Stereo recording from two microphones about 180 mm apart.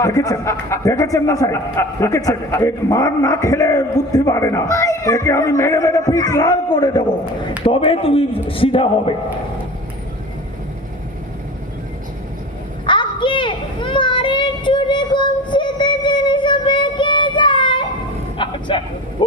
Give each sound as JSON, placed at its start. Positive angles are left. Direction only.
{"t": 0.0, "sound": "a man's voice", "side_deg": 20}
{"t": 12.8, "sound": "children playing", "side_deg": 25}
{"t": 18.4, "sound": "a sound", "side_deg": 25}